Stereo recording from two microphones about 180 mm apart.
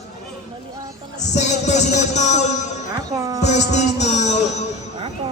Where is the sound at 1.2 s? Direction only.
40° left (ahead or behind).